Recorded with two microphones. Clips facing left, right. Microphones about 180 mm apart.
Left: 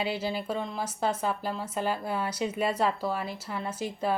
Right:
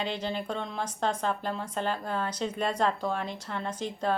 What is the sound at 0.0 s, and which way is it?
Speech, 5° left (ahead or behind).